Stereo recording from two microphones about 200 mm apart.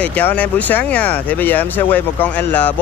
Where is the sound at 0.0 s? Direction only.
10° left (ahead or behind).